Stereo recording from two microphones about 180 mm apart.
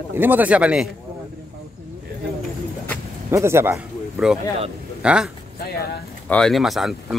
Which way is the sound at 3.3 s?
15° right (ahead or behind).